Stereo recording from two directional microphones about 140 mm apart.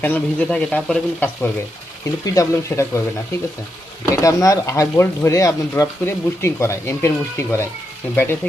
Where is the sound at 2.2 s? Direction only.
25° left (ahead or behind).